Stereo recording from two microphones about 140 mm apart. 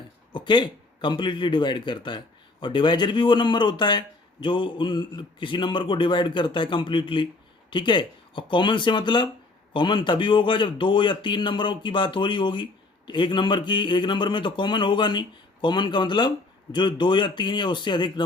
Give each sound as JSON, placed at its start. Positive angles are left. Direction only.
{"t": 0.3, "sound": "speech", "side_deg": 35}